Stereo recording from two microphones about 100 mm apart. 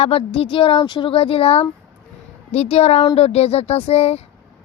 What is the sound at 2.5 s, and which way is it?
Speech, 90° left.